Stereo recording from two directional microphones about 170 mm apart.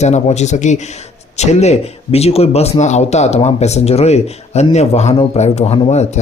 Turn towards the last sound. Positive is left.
turn(degrees=35)  # may be behind; listen again after turning